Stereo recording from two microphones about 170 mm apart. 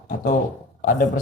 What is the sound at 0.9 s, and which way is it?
Speech, 50° left (ahead or behind).